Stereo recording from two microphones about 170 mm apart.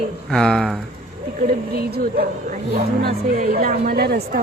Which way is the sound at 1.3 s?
60° right (ahead or behind).